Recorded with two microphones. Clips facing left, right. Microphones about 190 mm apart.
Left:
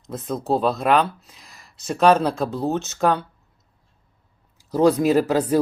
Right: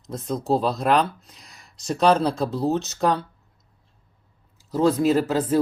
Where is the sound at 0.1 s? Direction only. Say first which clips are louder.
Even; centre (ahead or behind).